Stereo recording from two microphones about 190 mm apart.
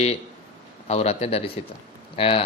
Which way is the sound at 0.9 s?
35° left (ahead or behind).